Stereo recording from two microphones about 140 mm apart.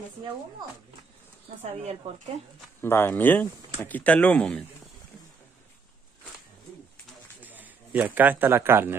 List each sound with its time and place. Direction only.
1.6 s speech: 50° right (ahead or behind)
2.8 s speech: 15° left (ahead or behind)
7.4 s speech: 10° right (ahead or behind)